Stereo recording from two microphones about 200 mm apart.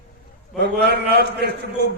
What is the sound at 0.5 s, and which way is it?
A man's voice, 55° right (ahead or behind).